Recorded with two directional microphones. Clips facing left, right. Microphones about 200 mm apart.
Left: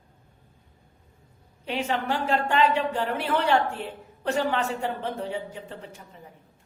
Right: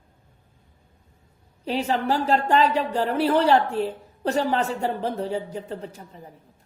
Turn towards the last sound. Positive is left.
turn(degrees=-40)  # may be behind; listen again after turning